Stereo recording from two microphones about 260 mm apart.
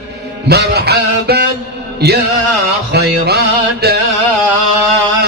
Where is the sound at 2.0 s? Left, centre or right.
Right.